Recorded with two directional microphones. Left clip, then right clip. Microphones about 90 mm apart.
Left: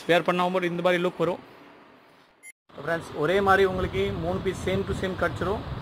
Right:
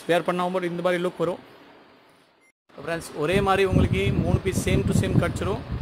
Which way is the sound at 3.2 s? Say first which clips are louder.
Even; 60° right (ahead or behind).